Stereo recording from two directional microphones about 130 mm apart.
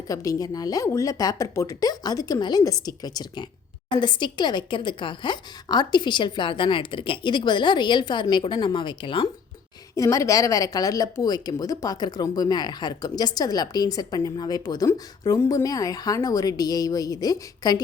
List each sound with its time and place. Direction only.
0.1 s speech: 25° left (ahead or behind)
9.9 s speech: 25° left (ahead or behind)